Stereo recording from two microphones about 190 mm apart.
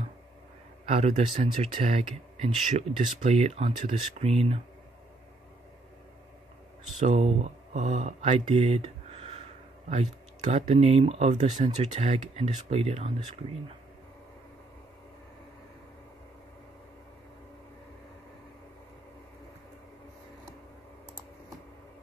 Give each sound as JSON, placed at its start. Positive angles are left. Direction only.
{"t": 0.8, "sound": "speech", "side_deg": -35}
{"t": 7.0, "sound": "speech", "side_deg": -35}